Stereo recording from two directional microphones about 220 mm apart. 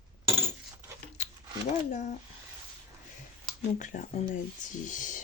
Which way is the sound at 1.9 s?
35° left (ahead or behind).